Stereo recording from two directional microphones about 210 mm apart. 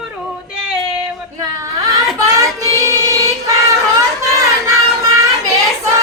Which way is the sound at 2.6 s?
15° right (ahead or behind).